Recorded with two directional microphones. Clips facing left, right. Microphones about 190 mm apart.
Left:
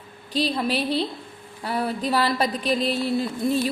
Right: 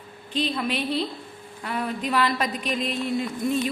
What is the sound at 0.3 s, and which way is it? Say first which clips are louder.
A woman's voice: left 3 dB; 35° left (ahead or behind).